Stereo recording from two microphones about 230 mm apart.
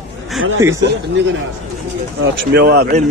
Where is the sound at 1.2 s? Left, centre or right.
Right.